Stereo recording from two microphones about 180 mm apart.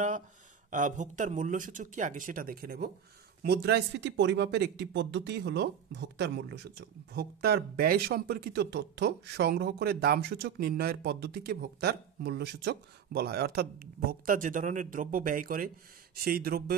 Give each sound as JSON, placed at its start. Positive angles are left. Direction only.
{"t": 0.7, "sound": "speech", "side_deg": -45}
{"t": 3.4, "sound": "speech", "side_deg": -65}
{"t": 7.2, "sound": "speech", "side_deg": -60}